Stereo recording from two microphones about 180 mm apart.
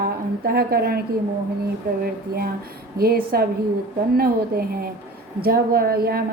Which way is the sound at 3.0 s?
55° right (ahead or behind).